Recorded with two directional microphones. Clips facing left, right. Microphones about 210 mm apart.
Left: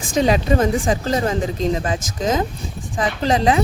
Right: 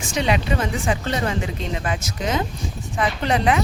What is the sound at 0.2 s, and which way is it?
A woman's voice, 40° left (ahead or behind).